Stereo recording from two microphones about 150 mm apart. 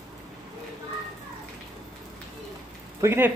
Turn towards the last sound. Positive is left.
turn(degrees=-15)  # may be behind; listen again after turning